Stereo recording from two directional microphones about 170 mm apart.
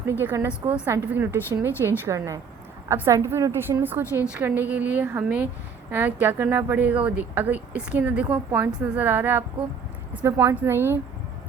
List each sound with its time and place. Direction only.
0.0 s a woman's voice: 15° right (ahead or behind)